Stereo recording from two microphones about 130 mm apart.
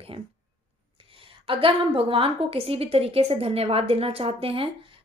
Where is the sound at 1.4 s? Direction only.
45° right (ahead or behind).